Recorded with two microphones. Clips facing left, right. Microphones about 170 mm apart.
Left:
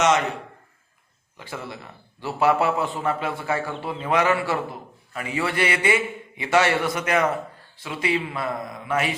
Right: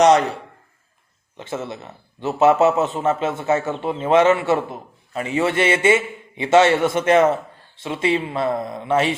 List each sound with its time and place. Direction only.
1.4 s a man's voice: 25° right (ahead or behind)